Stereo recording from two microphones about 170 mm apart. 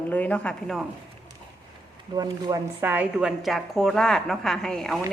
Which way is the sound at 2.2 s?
20° right (ahead or behind).